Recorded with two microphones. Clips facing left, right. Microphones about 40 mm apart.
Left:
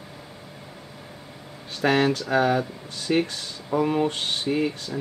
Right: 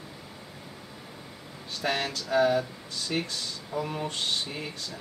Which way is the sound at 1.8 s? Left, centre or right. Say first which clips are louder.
Left 9 dB; left.